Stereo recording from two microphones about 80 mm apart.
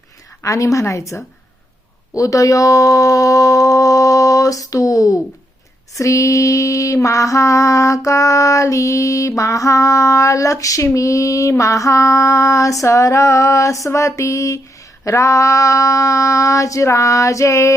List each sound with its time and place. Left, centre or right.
0.4 s female singing: left
2.1 s a sound: left
6.0 s mantra: left
10.8 s female singing: left